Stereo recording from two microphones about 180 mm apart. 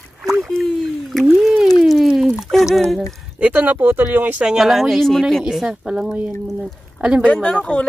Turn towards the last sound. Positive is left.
turn(degrees=5)  # may be behind; listen again after turning